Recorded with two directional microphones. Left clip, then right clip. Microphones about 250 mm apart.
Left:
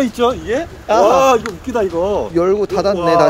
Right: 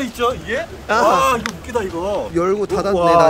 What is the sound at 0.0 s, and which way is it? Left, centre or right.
Speech, left.